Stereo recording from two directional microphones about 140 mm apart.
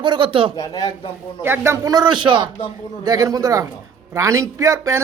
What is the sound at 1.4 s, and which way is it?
Speech, 15° right (ahead or behind).